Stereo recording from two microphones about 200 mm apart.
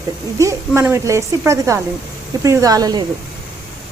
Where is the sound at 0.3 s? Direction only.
15° right (ahead or behind).